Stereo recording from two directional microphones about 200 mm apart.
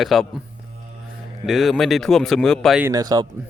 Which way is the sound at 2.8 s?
15° right (ahead or behind).